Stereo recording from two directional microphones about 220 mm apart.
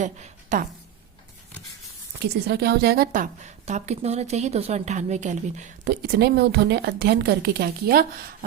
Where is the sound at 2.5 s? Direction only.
45° right (ahead or behind).